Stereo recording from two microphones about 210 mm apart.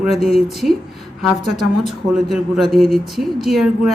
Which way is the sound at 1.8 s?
Centre (ahead or behind).